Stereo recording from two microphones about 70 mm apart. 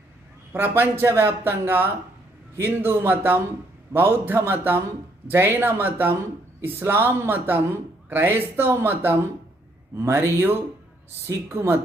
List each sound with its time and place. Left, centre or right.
0.8 s a man's voice: right